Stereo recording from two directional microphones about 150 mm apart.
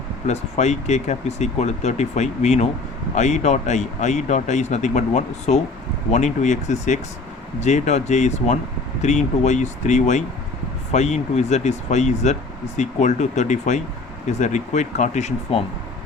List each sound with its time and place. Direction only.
0.3 s speech: 50° left (ahead or behind)
15.5 s speech: 40° left (ahead or behind)